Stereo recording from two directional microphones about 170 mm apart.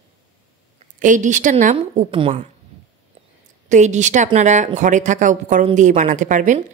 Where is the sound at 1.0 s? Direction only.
45° right (ahead or behind).